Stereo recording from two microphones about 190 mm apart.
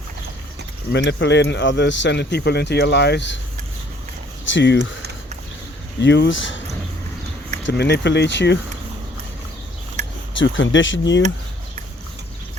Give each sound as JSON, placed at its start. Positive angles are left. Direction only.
{"t": 0.9, "sound": "speech", "side_deg": 70}
{"t": 4.4, "sound": "speech", "side_deg": 75}
{"t": 6.0, "sound": "speech", "side_deg": 65}
{"t": 7.6, "sound": "speech", "side_deg": 60}
{"t": 10.3, "sound": "speech", "side_deg": 80}